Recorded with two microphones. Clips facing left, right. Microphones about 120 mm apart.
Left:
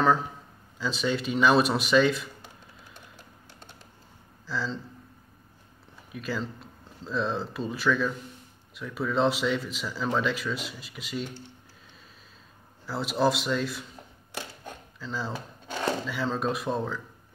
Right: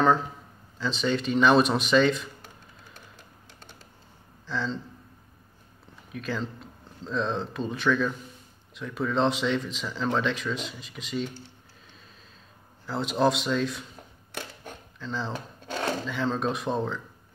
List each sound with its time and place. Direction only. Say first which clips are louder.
0.7 s speech: right 1 dB; 5° left (ahead or behind)
4.5 s speech: right 1 dB; 5° left (ahead or behind)
6.1 s speech: right 1 dB; 5° left (ahead or behind)
12.8 s speech: right 1 dB; 5° left (ahead or behind)
15.0 s speech: right 1 dB; 5° left (ahead or behind)